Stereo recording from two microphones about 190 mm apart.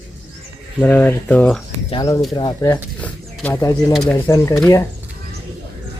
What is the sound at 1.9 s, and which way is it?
Speech, 20° left (ahead or behind).